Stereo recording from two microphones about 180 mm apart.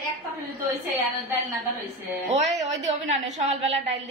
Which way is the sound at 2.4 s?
40° right (ahead or behind).